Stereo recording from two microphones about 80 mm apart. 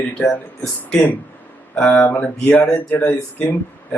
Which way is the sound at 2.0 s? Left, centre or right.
Left.